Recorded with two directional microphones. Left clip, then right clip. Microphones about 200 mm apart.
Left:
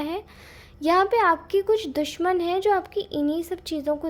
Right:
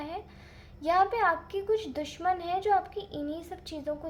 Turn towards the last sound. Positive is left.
turn(degrees=45)  # may be behind; listen again after turning